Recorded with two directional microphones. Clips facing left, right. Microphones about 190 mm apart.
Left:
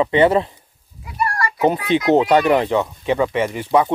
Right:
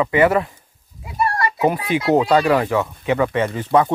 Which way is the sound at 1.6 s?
25° left (ahead or behind).